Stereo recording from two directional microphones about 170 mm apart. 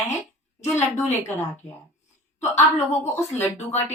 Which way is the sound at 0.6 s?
15° left (ahead or behind).